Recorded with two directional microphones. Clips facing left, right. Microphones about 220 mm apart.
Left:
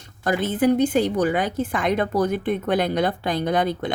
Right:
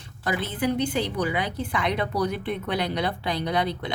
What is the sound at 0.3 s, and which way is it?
A woman's voice, 50° left (ahead or behind).